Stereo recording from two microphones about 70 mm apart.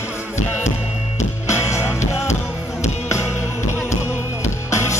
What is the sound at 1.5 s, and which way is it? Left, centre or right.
Music, left.